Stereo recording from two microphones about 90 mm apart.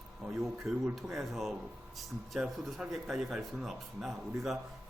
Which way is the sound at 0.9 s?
Centre (ahead or behind).